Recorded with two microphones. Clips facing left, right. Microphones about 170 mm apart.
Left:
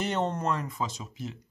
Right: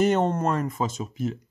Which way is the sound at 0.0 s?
50° right (ahead or behind).